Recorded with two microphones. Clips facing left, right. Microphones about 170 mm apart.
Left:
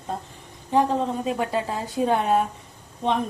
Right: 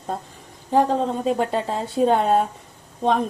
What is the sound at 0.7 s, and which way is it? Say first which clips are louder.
A woman's voice: right 2 dB; 35° right (ahead or behind).